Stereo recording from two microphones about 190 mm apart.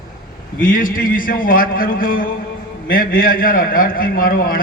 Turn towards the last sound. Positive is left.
turn(degrees=50)  # may be behind; listen again after turning